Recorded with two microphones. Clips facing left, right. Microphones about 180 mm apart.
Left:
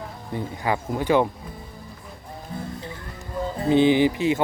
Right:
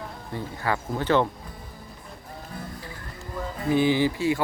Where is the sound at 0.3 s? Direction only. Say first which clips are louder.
Left 3 dB; 15° left (ahead or behind).